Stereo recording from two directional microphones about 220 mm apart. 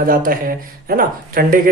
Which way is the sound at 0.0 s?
40° right (ahead or behind).